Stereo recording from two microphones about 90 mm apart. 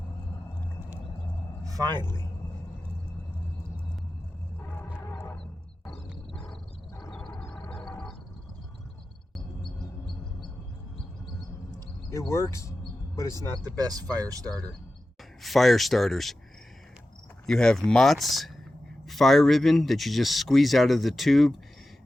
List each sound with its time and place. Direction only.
1.6 s a sound: 40° right (ahead or behind)
1.9 s speech: 25° left (ahead or behind)
7.0 s a sound: 5° left (ahead or behind)
12.3 s speech: 30° left (ahead or behind)
13.7 s speech: 45° right (ahead or behind)
15.4 s a man's voice: centre (ahead or behind)
17.4 s a man's voice: 5° left (ahead or behind)